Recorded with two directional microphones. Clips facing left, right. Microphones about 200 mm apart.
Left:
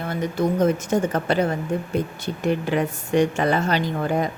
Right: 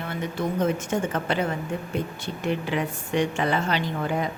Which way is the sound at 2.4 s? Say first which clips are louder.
Left 4 dB; 45° left (ahead or behind).